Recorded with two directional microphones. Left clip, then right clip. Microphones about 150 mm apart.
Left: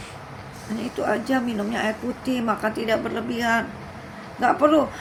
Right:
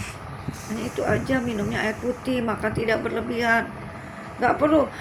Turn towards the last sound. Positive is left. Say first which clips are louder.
# left 2 dB
turn(degrees=25)  # may be behind; listen again after turning